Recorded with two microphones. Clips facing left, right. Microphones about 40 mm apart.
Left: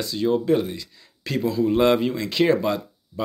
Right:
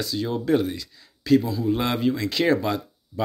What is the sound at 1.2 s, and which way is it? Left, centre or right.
Speech, left.